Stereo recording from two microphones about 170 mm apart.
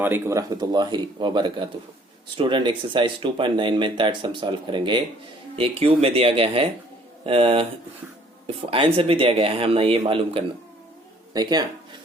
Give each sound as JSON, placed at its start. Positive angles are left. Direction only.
{"t": 0.0, "sound": "speech", "side_deg": -15}
{"t": 8.7, "sound": "speech", "side_deg": -35}